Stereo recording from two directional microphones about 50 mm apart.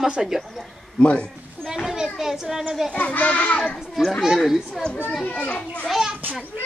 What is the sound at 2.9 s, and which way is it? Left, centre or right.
Speech, left.